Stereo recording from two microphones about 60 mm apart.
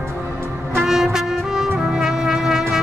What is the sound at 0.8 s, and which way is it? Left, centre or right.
Brass instrument, centre.